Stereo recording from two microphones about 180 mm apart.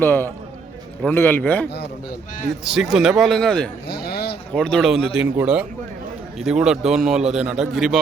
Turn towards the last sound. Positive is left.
turn(degrees=0)  # may be behind; listen again after turning